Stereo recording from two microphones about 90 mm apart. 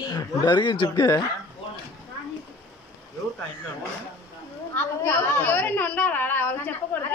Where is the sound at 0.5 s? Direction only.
60° left (ahead or behind).